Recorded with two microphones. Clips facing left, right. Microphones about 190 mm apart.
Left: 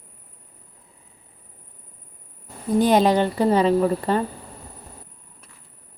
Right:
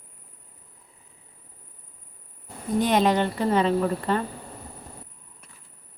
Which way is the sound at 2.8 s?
35° left (ahead or behind).